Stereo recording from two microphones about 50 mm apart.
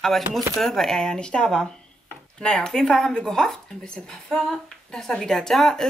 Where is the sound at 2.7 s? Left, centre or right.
Centre.